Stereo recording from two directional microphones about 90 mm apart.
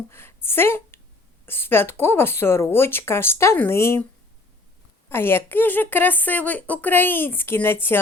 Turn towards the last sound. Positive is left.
turn(degrees=25)  # may be behind; listen again after turning